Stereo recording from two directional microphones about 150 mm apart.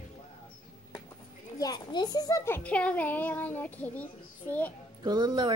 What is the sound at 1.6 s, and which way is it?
A child's voice, 25° left (ahead or behind).